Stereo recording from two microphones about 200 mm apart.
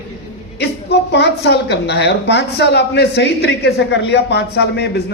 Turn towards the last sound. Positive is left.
turn(degrees=55)  # may be behind; listen again after turning